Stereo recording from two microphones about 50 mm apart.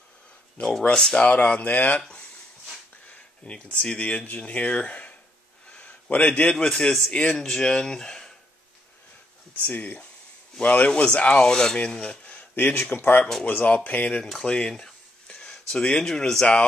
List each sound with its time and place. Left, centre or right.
0.8 s speech: centre
2.0 s speech: centre
5.7 s a sound: left
6.5 s speech: centre
9.6 s speech: left
10.9 s speech: centre
12.3 s speech: left
14.4 s speech: centre